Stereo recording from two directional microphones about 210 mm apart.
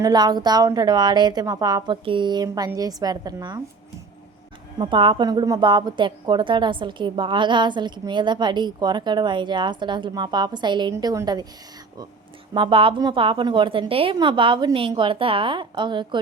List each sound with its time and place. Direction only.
0.0 s a woman's voice: 20° right (ahead or behind)
4.8 s a woman's voice: 25° right (ahead or behind)
12.5 s a woman's voice: 25° right (ahead or behind)